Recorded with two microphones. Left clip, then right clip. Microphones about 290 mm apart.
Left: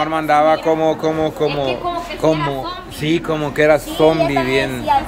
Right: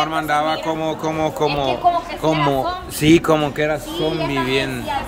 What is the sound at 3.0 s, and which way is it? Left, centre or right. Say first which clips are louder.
Speech: right 5 dB; centre.